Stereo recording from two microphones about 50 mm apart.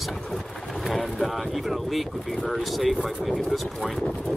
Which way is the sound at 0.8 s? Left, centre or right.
Centre.